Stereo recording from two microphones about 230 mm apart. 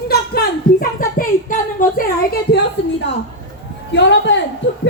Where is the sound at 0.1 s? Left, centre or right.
Left.